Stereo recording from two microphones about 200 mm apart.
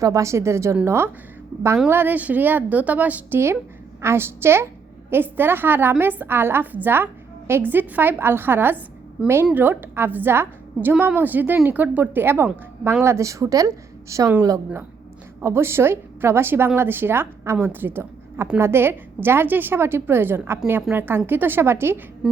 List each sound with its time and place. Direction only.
0.0 s a woman's voice: 15° right (ahead or behind)